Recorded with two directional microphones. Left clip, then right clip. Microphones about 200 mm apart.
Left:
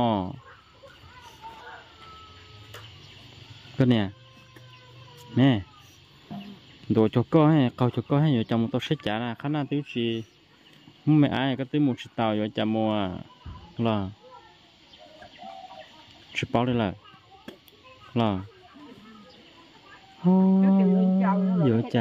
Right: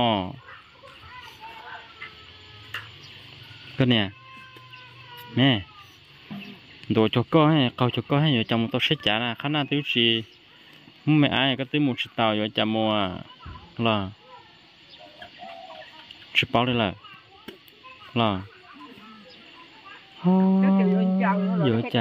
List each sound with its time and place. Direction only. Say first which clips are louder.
0.0 s fowl: right 2 dB; 15° left (ahead or behind)
2.7 s tick-tock: right 10 dB; 50° left (ahead or behind)
3.7 s speech: right 2 dB; 15° left (ahead or behind)
5.3 s speech: right 1 dB; 15° left (ahead or behind)
6.9 s speech: right 1 dB; 15° left (ahead or behind); by 10.2 s centre (ahead or behind)
11.1 s speech: right 2 dB; 10° left (ahead or behind)
16.3 s speech: right 4 dB; 15° left (ahead or behind)
18.1 s speech: right 3 dB; 15° left (ahead or behind)
20.2 s speech: right 1 dB; 5° left (ahead or behind)
21.2 s speech: right 2 dB; 40° right (ahead or behind)